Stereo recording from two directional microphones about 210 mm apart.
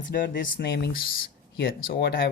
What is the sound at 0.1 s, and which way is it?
Speech, 40° left (ahead or behind).